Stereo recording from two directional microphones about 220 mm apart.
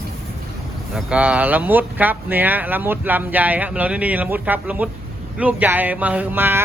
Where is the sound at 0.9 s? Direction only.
5° right (ahead or behind).